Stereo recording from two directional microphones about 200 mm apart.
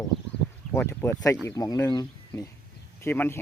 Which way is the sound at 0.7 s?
10° left (ahead or behind).